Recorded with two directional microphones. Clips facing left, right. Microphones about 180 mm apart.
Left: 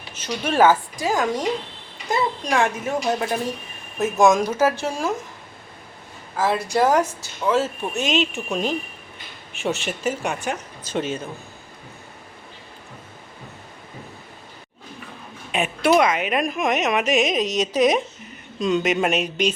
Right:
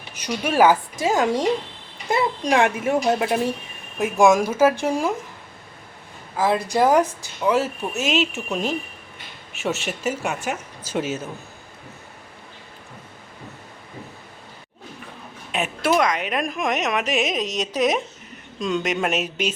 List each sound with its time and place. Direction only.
0.1 s a woman's voice: 10° right (ahead or behind)
0.9 s a woman's voice: 20° right (ahead or behind)
3.9 s a woman's voice: 15° right (ahead or behind)
6.3 s a woman's voice: 15° right (ahead or behind)
15.5 s a sound: centre (ahead or behind)
15.9 s speech: 5° left (ahead or behind)